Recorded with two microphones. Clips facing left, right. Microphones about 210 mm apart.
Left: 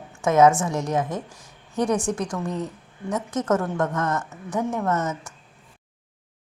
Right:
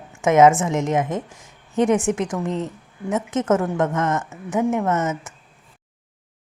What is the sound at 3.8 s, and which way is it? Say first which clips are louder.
Speech: right 3 dB; 20° right (ahead or behind).